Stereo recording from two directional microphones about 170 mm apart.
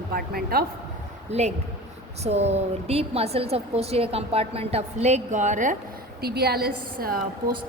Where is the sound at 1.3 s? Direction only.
40° right (ahead or behind).